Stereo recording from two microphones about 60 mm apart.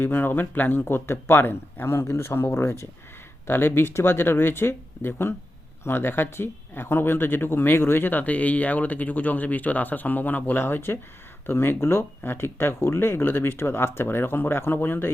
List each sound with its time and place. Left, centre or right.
0.0 s speech: left